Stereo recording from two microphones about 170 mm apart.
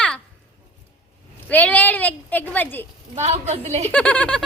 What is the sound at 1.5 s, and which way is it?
Speech, 10° left (ahead or behind).